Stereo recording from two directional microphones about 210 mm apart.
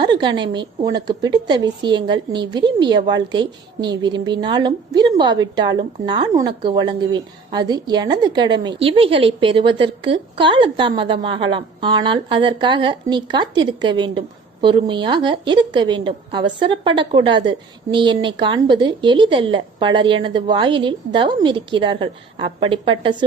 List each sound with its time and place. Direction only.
0.0 s a woman's voice: 20° right (ahead or behind)